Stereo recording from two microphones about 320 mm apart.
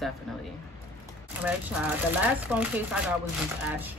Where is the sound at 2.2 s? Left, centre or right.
Centre.